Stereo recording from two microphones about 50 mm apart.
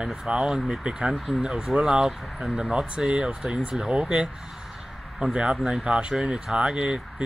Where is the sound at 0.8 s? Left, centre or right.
Centre.